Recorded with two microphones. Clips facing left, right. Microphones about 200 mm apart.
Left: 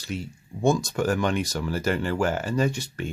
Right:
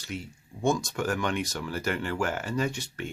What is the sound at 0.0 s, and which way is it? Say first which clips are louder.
Speech: left 4 dB; 30° left (ahead or behind).